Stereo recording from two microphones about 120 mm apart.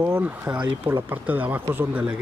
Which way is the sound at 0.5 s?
25° right (ahead or behind).